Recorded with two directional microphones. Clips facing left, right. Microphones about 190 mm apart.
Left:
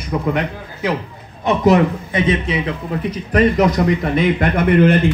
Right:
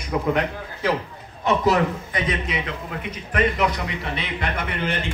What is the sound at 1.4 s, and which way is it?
A man's voice, 20° left (ahead or behind).